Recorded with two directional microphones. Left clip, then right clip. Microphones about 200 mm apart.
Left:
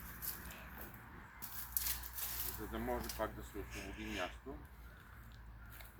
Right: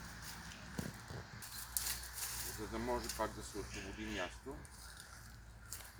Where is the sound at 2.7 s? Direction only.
45° right (ahead or behind).